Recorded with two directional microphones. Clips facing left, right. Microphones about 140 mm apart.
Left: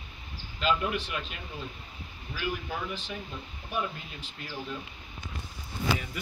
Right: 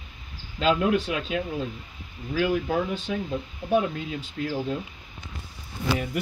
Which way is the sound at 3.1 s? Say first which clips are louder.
Right 10 dB; 80° right.